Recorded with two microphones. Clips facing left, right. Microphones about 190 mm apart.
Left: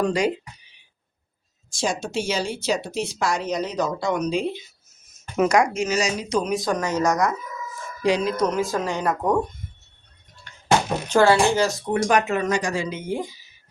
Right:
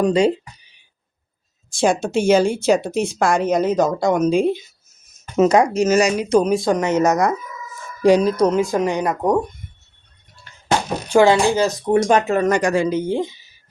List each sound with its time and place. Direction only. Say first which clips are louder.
0.0 s speech: right 6 dB; 25° right (ahead or behind)
1.7 s a woman's voice: right 8 dB; 55° right (ahead or behind)
5.4 s speech: right 5 dB; 25° right (ahead or behind)
5.7 s a woman's voice: right 8 dB; 40° right (ahead or behind)
6.0 s speech: right 7 dB; 60° right (ahead or behind)
6.4 s speech: right 6 dB; 30° right (ahead or behind)
8.0 s speech: right 7 dB; 45° right (ahead or behind); by 9.5 s 15° right (ahead or behind)
11.1 s speech: right 3 dB; 15° right (ahead or behind)
12.5 s speech: right 7 dB; 55° right (ahead or behind)
12.9 s speech: right 7 dB; 30° right (ahead or behind)